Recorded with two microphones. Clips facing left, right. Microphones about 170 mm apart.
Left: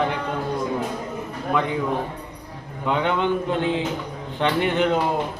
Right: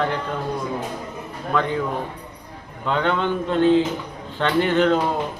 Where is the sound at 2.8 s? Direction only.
15° left (ahead or behind).